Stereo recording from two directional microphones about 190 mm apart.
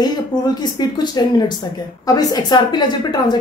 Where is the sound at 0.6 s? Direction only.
20° left (ahead or behind).